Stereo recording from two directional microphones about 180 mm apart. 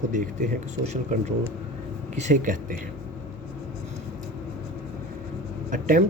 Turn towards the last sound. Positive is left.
turn(degrees=-45)  # may be behind; listen again after turning